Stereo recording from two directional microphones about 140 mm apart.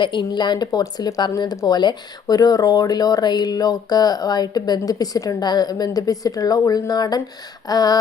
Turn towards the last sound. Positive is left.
turn(degrees=30)  # may be behind; listen again after turning